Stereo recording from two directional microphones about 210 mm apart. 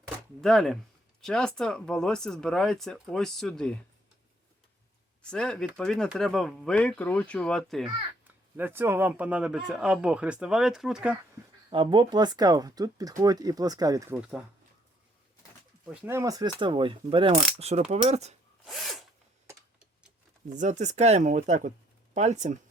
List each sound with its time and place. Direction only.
0.4 s speech: centre (ahead or behind)
5.3 s speech: 5° left (ahead or behind)
8.5 s speech: 10° right (ahead or behind)
11.7 s speech: 25° right (ahead or behind)
14.2 s speech: 5° right (ahead or behind)
15.9 s speech: 10° right (ahead or behind); by 18.3 s 30° right (ahead or behind)
18.6 s drill: centre (ahead or behind)
19.5 s typing: 5° right (ahead or behind)
20.5 s speech: 35° right (ahead or behind)